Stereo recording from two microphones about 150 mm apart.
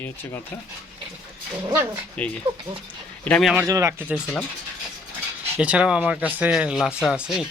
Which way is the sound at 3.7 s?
20° right (ahead or behind).